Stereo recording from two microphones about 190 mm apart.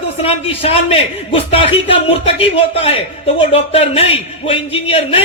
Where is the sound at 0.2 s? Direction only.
30° left (ahead or behind).